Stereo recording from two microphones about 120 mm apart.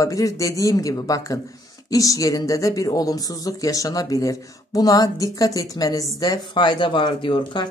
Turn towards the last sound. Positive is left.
turn(degrees=45)  # may be behind; listen again after turning